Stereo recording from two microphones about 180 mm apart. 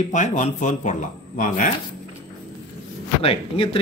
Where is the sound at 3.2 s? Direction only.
30° left (ahead or behind).